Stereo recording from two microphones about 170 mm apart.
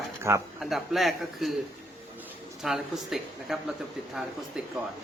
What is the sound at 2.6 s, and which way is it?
Speech, centre (ahead or behind).